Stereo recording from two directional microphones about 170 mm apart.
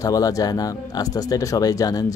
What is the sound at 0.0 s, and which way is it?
Speech, 20° left (ahead or behind).